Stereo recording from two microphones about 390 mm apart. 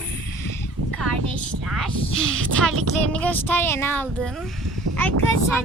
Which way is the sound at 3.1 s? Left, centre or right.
Centre.